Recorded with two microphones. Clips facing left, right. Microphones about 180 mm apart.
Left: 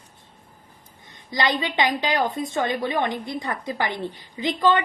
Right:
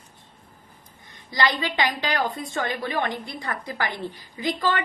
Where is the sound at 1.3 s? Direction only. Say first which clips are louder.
Left 1 dB; 20° left (ahead or behind).